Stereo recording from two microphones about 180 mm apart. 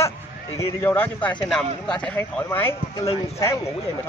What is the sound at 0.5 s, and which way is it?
A man's voice, 15° left (ahead or behind).